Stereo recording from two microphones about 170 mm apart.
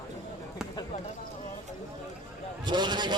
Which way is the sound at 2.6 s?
25° right (ahead or behind).